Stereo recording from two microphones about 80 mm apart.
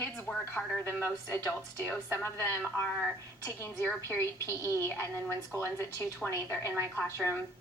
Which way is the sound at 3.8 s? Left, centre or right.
Left.